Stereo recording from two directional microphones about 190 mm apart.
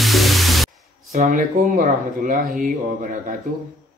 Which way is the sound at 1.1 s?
45° right (ahead or behind).